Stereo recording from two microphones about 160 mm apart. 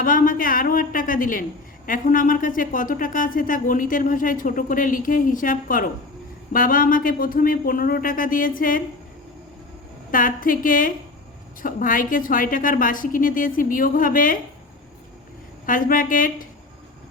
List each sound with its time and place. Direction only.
0.0 s speech: 60° left (ahead or behind)
10.1 s speech: 60° left (ahead or behind)
15.6 s speech: 60° left (ahead or behind)